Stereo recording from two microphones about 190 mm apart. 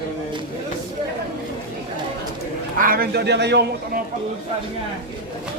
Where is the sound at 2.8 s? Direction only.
50° right (ahead or behind).